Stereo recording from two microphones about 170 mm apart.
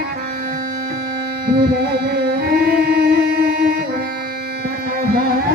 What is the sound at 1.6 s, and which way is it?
Music, 70° right (ahead or behind).